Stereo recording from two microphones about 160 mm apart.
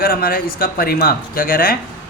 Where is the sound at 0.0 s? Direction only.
70° left (ahead or behind).